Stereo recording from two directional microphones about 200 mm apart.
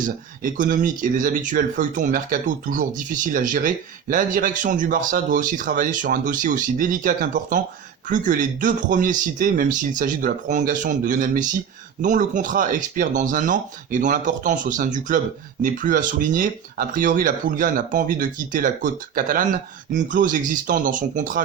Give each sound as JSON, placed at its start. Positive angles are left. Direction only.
{"t": 0.0, "sound": "speech", "side_deg": -40}